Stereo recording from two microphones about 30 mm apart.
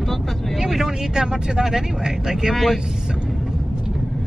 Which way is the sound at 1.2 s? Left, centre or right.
Right.